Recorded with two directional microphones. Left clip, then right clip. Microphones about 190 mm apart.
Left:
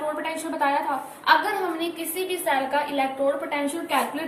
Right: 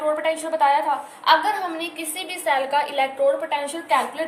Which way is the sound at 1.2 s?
45° right (ahead or behind).